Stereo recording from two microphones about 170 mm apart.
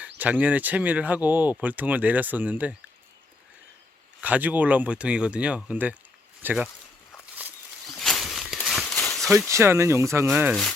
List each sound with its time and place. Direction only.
0.2 s speech: 10° right (ahead or behind)
4.2 s speech: 10° right (ahead or behind)
7.9 s a sound: centre (ahead or behind)
9.5 s speech: 15° right (ahead or behind)